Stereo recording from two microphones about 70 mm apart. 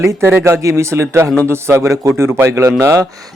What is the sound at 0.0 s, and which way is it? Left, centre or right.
A man's voice, right.